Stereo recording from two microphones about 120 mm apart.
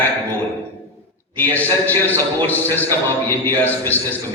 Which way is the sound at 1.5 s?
15° left (ahead or behind).